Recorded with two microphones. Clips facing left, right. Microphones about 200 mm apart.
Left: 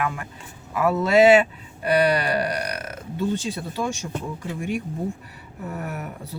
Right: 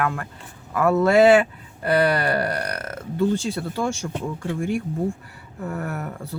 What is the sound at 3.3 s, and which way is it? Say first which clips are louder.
Speech: right 3 dB; 20° left (ahead or behind).